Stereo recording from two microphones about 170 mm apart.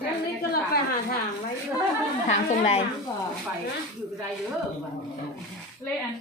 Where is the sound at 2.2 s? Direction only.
40° left (ahead or behind).